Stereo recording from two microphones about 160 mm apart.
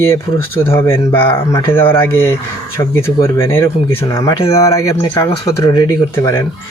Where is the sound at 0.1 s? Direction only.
15° left (ahead or behind).